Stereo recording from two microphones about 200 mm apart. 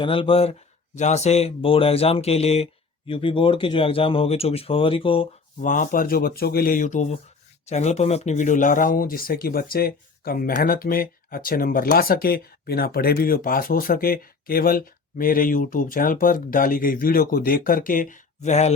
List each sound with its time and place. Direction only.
0.0 s speech: 25° left (ahead or behind)
5.5 s speech: 40° left (ahead or behind)